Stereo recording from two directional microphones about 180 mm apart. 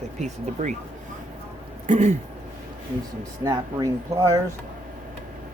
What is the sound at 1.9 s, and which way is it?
Speech, 40° right (ahead or behind).